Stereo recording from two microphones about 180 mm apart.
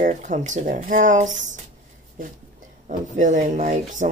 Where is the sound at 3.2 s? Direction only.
45° right (ahead or behind).